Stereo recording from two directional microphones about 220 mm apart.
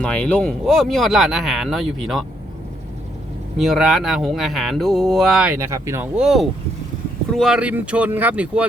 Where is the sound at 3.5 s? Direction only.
Centre (ahead or behind).